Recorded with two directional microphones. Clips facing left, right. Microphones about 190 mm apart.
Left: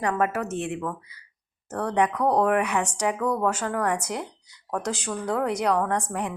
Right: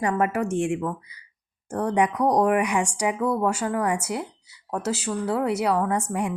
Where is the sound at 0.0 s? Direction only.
10° right (ahead or behind).